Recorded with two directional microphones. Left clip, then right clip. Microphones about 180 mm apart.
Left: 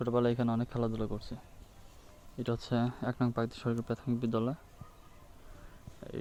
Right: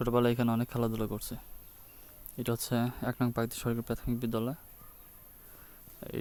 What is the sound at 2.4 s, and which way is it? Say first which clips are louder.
Speech: right 1 dB; 20° right (ahead or behind).